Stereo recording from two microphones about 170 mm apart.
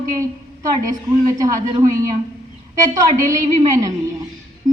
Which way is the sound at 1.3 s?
20° right (ahead or behind).